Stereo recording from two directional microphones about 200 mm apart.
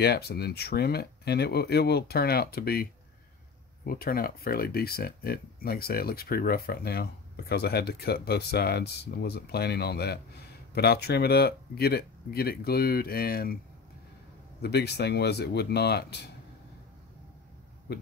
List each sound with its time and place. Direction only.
0.0 s speech: 50° left (ahead or behind)
14.6 s speech: 55° left (ahead or behind)
17.9 s speech: 55° left (ahead or behind)